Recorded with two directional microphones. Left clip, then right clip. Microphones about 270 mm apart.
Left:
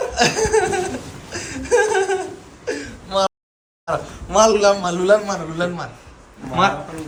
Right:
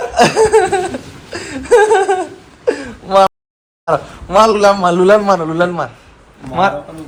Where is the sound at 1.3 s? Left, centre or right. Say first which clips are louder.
Right 7 dB; centre.